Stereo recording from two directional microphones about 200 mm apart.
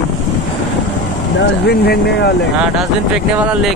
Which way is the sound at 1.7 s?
55° left (ahead or behind).